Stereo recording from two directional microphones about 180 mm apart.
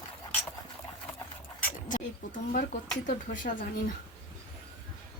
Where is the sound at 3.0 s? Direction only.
45° left (ahead or behind).